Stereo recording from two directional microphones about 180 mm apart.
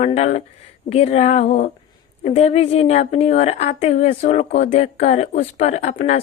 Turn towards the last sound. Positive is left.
turn(degrees=40)  # may be behind; listen again after turning